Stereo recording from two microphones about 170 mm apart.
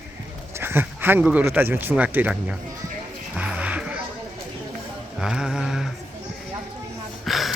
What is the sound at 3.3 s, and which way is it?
Music, 5° right (ahead or behind).